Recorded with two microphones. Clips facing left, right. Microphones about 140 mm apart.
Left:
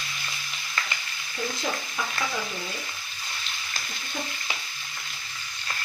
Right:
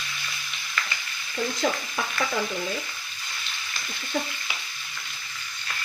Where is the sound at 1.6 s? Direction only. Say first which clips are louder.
Right 6 dB; 80° right.